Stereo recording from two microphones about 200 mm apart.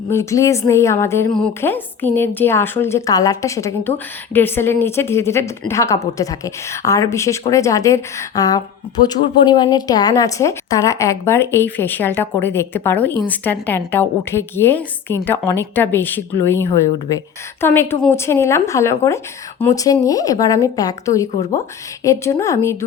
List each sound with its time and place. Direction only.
0.1 s a woman's voice: 15° left (ahead or behind)